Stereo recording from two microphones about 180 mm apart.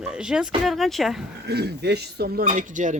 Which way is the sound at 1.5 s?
65° right (ahead or behind).